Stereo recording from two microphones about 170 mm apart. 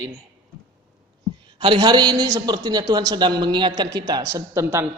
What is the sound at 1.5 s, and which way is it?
A man's voice, 25° right (ahead or behind).